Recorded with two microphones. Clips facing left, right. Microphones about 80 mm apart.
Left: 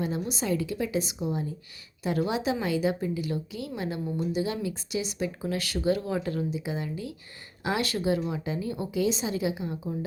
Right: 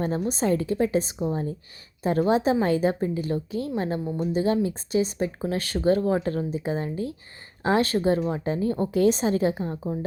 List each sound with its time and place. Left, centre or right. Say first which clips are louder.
0.0 s speech: right 5 dB; right